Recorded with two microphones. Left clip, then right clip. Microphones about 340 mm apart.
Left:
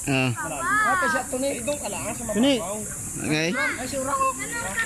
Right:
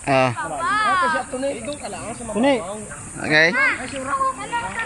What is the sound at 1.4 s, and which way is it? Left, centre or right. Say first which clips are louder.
Speech: right 1 dB; centre.